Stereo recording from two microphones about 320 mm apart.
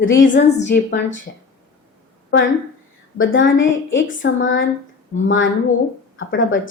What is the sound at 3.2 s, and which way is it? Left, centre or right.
A woman's voice, left.